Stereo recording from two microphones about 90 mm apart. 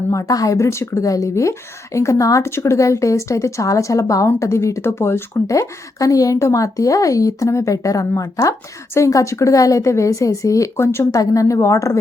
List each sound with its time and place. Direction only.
0.1 s speech: 40° left (ahead or behind)